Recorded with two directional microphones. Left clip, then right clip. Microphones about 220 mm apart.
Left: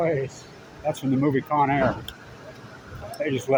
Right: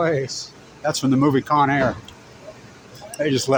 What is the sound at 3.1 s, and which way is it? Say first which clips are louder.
Speech: right 4 dB; 40° right (ahead or behind).